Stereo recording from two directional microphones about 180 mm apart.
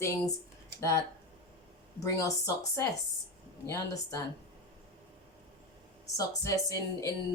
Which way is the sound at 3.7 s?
20° left (ahead or behind).